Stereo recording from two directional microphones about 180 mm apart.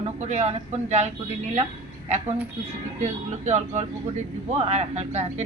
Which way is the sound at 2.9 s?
40° right (ahead or behind).